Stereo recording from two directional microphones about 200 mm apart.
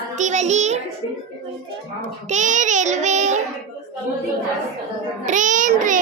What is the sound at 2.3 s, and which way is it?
A child's voice, 40° right (ahead or behind).